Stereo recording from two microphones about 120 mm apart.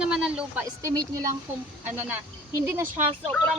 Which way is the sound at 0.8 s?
25° right (ahead or behind).